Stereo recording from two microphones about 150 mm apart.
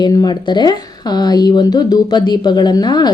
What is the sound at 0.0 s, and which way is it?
Speech, 25° left (ahead or behind).